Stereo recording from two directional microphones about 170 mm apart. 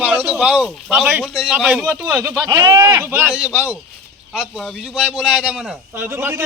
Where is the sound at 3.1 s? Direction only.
5° right (ahead or behind).